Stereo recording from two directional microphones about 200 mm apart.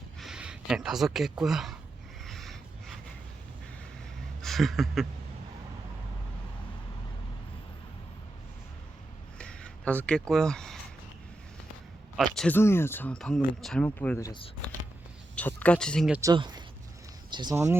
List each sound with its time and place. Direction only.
0.2 s speech: 5° right (ahead or behind)
2.2 s a sound: centre (ahead or behind)
4.4 s speech: centre (ahead or behind)
9.4 s a sound: 5° left (ahead or behind)
12.1 s speech: centre (ahead or behind); by 14.5 s 20° left (ahead or behind)
15.4 s speech: 10° left (ahead or behind)
16.2 s speech: 20° right (ahead or behind)